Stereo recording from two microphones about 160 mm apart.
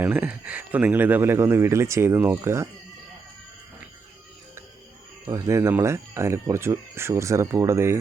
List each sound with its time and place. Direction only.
0.0 s speech: 10° right (ahead or behind)
5.2 s speech: 20° right (ahead or behind)